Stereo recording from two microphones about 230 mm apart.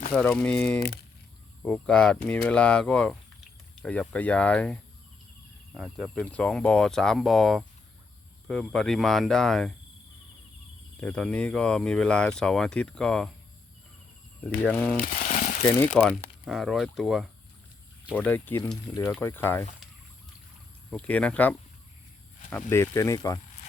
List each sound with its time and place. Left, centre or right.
0.1 s speech: centre
11.0 s speech: centre
14.4 s speech: centre
15.0 s a sound: left
16.0 s speech: centre
18.3 s speech: centre
20.9 s speech: centre
22.7 s speech: centre